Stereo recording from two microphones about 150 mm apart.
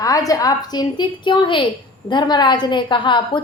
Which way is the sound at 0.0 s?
25° left (ahead or behind).